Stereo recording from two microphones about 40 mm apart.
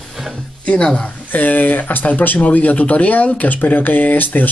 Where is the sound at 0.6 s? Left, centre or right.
Left.